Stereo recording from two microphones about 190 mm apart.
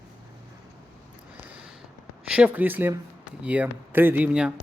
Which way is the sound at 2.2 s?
5° right (ahead or behind).